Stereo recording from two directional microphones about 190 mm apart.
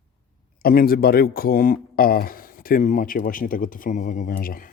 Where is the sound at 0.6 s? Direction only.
50° left (ahead or behind).